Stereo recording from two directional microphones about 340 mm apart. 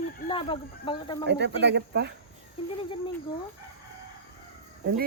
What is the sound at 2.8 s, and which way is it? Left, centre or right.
Speech, centre.